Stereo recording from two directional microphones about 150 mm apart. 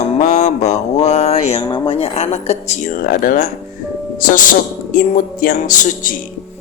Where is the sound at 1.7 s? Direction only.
30° left (ahead or behind).